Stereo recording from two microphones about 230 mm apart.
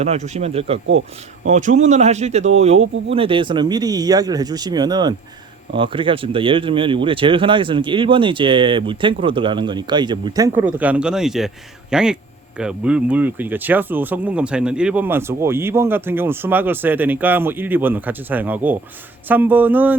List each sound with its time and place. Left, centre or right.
0.0 s a man's voice: right; by 20.0 s centre